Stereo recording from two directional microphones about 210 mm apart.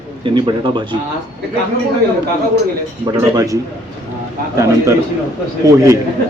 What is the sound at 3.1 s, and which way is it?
Speech, 15° right (ahead or behind).